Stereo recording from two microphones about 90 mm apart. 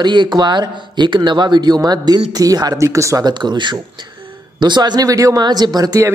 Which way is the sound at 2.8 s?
35° right (ahead or behind).